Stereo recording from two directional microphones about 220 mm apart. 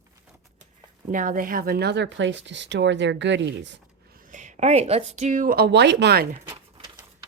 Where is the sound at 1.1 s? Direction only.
35° right (ahead or behind).